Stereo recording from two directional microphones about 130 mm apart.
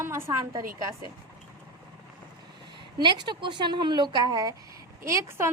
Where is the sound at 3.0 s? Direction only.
35° right (ahead or behind).